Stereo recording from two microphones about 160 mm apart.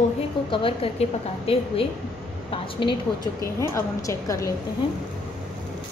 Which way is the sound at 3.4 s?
20° left (ahead or behind).